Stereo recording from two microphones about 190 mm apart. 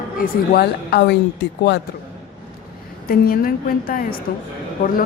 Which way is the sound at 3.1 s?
50° left (ahead or behind).